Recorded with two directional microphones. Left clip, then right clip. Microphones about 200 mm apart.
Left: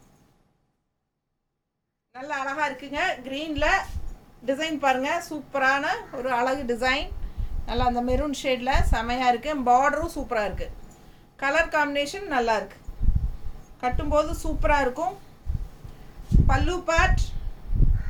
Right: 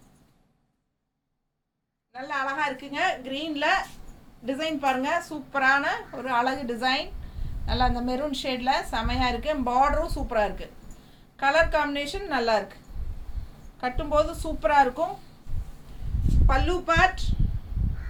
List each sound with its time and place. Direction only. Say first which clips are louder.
2.1 s a woman's voice: even; 10° left (ahead or behind)
13.8 s a woman's voice: left 1 dB; 15° left (ahead or behind)
16.5 s a woman's voice: right 1 dB; 10° left (ahead or behind)